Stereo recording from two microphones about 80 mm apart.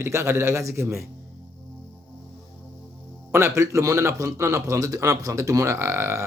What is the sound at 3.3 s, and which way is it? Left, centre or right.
A man's voice, right.